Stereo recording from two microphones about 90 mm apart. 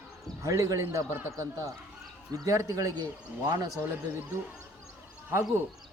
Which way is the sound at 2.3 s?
40° right (ahead or behind).